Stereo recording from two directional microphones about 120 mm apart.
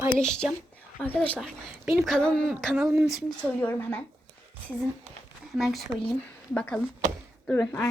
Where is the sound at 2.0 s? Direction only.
5° left (ahead or behind).